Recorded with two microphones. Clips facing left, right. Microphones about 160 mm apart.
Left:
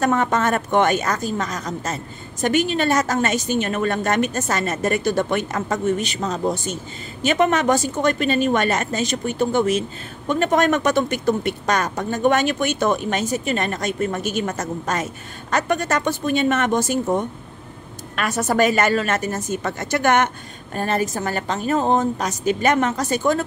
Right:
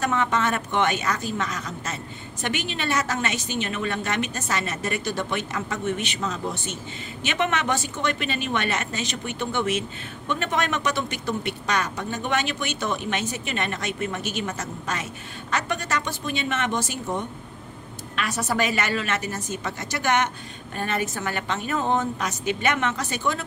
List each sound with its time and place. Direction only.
0.0 s a woman's voice: 45° left (ahead or behind)
20.7 s a woman's voice: 40° left (ahead or behind)